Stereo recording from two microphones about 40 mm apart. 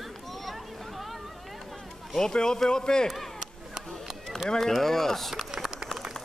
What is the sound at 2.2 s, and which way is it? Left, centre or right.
Speech, centre.